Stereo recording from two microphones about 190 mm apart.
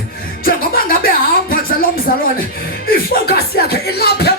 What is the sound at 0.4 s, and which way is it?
Music, 50° left (ahead or behind).